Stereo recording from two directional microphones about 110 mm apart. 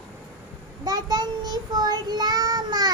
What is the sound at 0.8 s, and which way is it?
Child singing, 40° right (ahead or behind).